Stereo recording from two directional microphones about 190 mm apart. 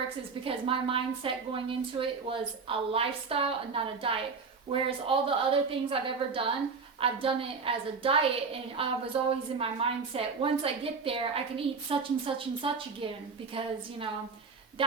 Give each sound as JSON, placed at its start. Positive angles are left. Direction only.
{"t": 0.4, "sound": "a woman's voice", "side_deg": -30}